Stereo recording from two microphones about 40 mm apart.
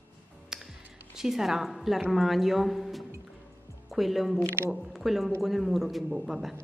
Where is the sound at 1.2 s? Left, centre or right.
Centre.